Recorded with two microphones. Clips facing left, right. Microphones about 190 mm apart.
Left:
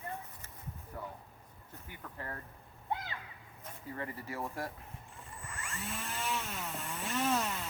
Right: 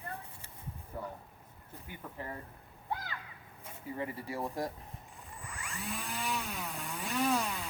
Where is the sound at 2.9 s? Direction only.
25° left (ahead or behind).